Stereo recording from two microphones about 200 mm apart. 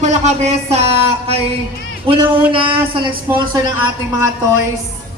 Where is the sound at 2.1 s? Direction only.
25° right (ahead or behind).